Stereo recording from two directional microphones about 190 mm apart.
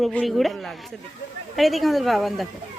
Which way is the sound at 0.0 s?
5° left (ahead or behind).